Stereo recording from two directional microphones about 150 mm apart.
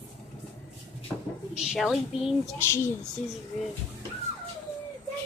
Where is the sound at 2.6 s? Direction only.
15° left (ahead or behind).